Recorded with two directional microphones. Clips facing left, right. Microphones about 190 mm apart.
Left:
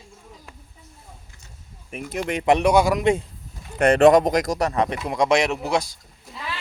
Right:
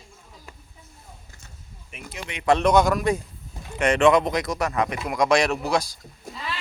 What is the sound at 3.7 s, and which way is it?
Speech, 35° left (ahead or behind).